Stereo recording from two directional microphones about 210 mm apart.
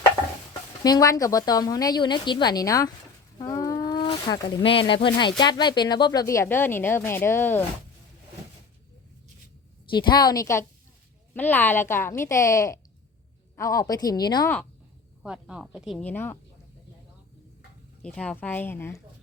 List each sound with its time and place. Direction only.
0.9 s a woman's voice: 20° left (ahead or behind)
3.3 s a sound: 15° left (ahead or behind)
5.0 s a woman's voice: 20° left (ahead or behind)
9.9 s a woman's voice: 20° left (ahead or behind)
15.2 s speech: 5° right (ahead or behind)
18.0 s a woman's voice: 5° left (ahead or behind)